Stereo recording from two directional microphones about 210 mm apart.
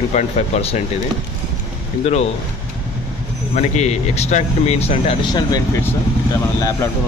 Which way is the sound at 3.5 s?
35° left (ahead or behind).